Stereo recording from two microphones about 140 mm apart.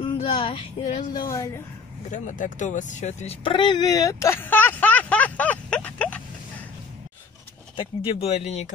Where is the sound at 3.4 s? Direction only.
35° left (ahead or behind); by 6.2 s 10° left (ahead or behind).